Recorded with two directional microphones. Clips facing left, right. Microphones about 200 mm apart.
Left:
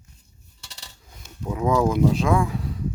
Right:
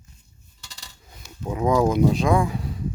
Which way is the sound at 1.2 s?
50° left (ahead or behind).